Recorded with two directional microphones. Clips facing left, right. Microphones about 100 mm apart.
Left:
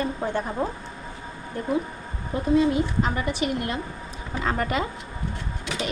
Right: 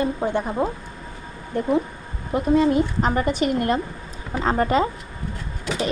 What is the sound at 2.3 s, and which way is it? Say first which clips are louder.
Speech: right 5 dB; 60° right (ahead or behind).